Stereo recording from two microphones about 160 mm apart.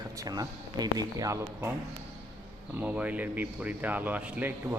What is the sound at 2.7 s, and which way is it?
Speech, 10° right (ahead or behind).